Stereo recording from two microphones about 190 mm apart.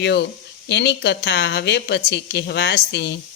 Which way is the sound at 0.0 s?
65° left (ahead or behind).